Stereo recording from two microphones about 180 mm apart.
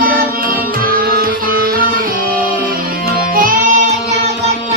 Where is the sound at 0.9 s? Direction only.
55° right (ahead or behind).